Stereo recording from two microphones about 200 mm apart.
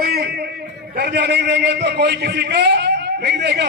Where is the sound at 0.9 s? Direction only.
55° right (ahead or behind).